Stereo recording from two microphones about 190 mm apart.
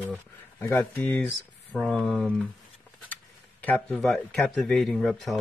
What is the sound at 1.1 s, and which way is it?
Speech, centre (ahead or behind).